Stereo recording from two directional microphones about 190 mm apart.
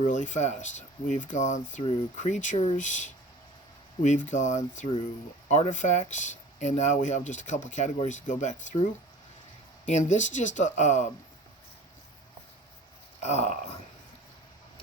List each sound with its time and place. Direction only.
0.1 s speech: 40° left (ahead or behind)
13.2 s speech: 35° left (ahead or behind)